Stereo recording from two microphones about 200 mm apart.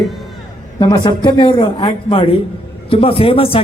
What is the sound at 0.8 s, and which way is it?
Speech, 25° left (ahead or behind).